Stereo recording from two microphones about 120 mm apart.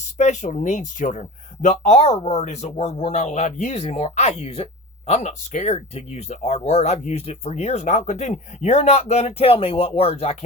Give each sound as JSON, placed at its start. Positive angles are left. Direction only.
{"t": 0.0, "sound": "speech", "side_deg": 85}